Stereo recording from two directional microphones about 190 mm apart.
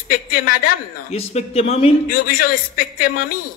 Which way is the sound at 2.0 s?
50° left (ahead or behind).